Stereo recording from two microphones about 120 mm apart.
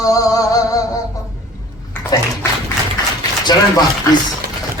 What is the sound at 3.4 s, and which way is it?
Speech, 35° left (ahead or behind).